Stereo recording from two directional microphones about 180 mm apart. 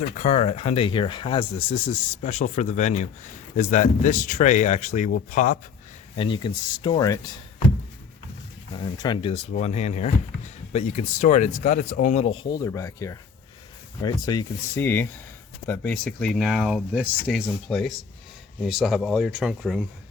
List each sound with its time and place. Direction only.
0.2 s speech: 40° left (ahead or behind)
6.1 s speech: 25° left (ahead or behind)
8.7 s speech: 25° left (ahead or behind)
9.5 s speech: 40° left (ahead or behind); by 19.8 s centre (ahead or behind)